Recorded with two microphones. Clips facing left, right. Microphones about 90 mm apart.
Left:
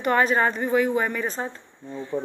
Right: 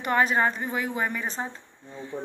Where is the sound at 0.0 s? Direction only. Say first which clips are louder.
Left 2 dB; 10° right (ahead or behind).